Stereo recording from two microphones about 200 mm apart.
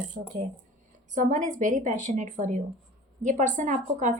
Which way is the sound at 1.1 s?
40° right (ahead or behind).